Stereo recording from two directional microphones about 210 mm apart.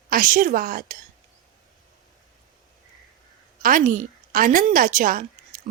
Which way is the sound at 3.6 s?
40° right (ahead or behind).